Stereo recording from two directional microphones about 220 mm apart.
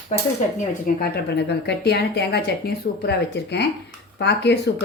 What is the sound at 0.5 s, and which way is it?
A woman's voice, 45° left (ahead or behind).